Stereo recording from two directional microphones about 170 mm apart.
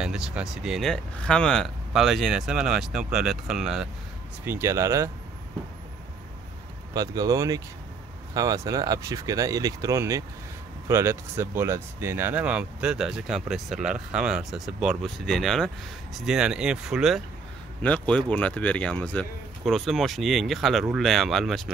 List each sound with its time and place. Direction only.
0.0 s speech: 5° right (ahead or behind)
4.5 s speech: 15° right (ahead or behind)
6.9 s speech: 20° right (ahead or behind); by 21.6 s centre (ahead or behind)